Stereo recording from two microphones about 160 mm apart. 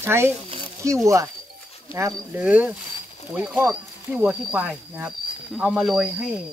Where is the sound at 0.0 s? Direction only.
15° right (ahead or behind).